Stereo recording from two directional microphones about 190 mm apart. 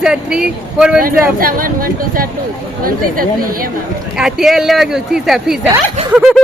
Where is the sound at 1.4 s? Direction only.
50° right (ahead or behind).